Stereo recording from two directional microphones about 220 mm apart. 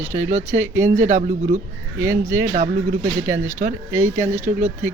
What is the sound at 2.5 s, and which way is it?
Speech, 30° right (ahead or behind).